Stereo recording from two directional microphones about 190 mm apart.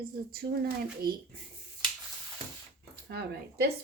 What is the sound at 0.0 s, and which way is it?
Speech, 55° right (ahead or behind).